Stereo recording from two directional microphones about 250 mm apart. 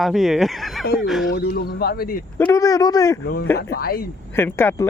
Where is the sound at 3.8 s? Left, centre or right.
Left.